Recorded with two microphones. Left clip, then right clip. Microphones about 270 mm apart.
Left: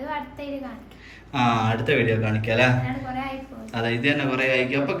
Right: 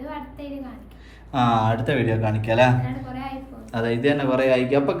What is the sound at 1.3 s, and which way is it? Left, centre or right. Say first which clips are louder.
Speech: right 2 dB; centre.